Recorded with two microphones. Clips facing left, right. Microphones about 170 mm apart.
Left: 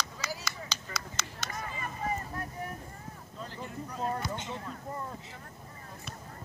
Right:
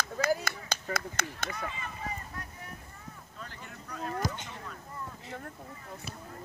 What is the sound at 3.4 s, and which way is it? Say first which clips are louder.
Speech: left 7 dB; 30° left (ahead or behind).